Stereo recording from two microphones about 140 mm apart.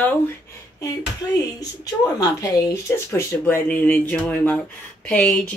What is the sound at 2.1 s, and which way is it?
Speech, 25° left (ahead or behind).